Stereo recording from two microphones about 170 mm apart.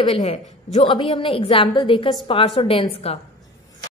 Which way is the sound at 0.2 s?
40° left (ahead or behind).